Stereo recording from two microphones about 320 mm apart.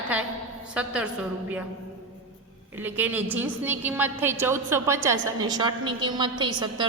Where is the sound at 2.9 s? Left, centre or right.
Centre.